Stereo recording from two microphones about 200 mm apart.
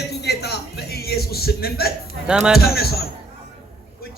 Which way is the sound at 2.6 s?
50° left (ahead or behind).